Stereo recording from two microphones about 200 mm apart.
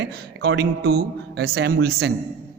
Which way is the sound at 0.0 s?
55° right (ahead or behind).